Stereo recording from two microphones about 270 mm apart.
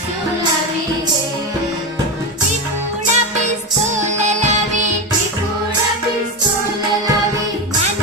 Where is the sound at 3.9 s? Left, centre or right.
Right.